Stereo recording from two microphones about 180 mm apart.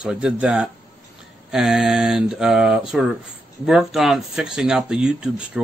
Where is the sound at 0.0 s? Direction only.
5° right (ahead or behind).